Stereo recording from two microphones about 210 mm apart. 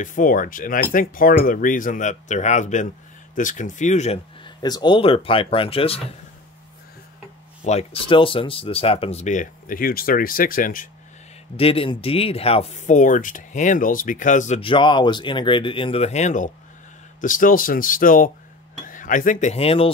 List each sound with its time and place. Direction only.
0.0 s speech: 40° left (ahead or behind)
4.6 s speech: 20° left (ahead or behind)
7.6 s speech: 30° left (ahead or behind)
11.5 s speech: 25° left (ahead or behind)